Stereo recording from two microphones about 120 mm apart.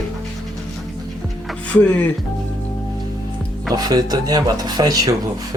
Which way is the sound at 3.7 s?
30° right (ahead or behind).